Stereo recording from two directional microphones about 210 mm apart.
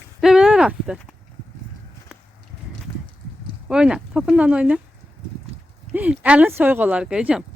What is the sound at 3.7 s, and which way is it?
Speech, 5° right (ahead or behind).